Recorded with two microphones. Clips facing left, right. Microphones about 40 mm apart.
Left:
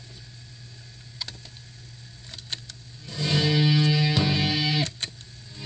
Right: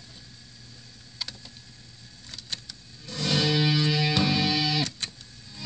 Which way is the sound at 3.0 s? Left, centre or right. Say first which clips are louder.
Left 1 dB; right.